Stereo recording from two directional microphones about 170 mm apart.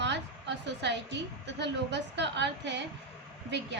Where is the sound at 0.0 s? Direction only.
90° right.